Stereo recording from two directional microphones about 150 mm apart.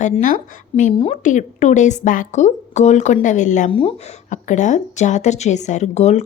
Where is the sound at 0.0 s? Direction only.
60° left (ahead or behind).